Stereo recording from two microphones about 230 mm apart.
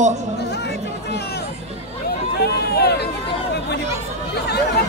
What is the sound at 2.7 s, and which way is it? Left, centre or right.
Run, left.